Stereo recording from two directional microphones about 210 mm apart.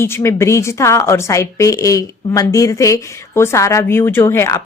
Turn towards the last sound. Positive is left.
turn(degrees=15)  # may be behind; listen again after turning